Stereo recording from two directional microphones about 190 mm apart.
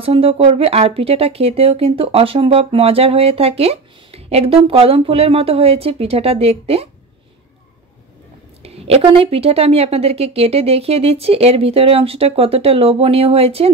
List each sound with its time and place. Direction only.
0.0 s speech: 30° right (ahead or behind)
8.6 s speech: 30° right (ahead or behind)